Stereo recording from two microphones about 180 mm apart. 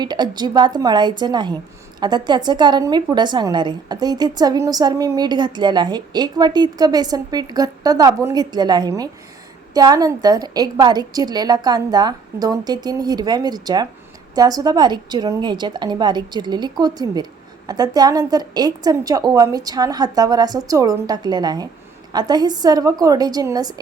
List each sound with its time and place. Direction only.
0.0 s a woman's voice: 25° right (ahead or behind)